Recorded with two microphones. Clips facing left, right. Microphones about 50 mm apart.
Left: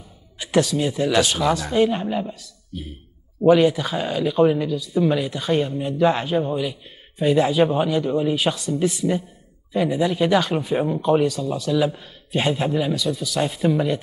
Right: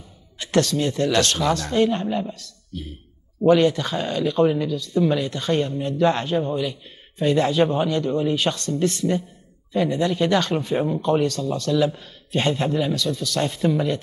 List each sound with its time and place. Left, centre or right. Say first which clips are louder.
0.4 s speech: left 1 dB; centre